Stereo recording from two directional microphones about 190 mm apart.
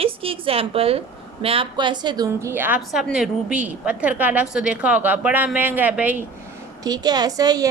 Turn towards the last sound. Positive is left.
turn(degrees=-20)  # may be behind; listen again after turning